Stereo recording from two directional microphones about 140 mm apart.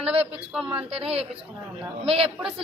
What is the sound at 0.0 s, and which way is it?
Speech, 45° right (ahead or behind).